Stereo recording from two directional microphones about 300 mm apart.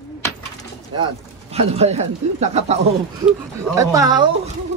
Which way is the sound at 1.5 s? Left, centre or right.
Right.